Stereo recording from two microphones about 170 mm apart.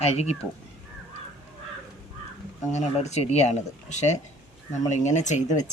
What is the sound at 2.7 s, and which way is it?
A man's voice, 40° left (ahead or behind).